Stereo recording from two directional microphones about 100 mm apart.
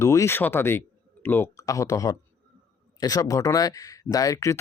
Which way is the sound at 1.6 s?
35° left (ahead or behind).